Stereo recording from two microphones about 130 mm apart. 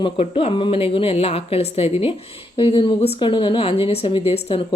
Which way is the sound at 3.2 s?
35° left (ahead or behind).